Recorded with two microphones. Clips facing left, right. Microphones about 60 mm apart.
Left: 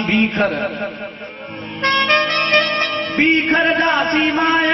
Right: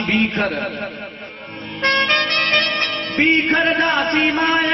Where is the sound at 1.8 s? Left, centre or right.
Centre.